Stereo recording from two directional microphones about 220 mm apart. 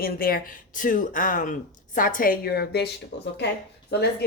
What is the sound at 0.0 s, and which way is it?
A woman's voice, 40° left (ahead or behind).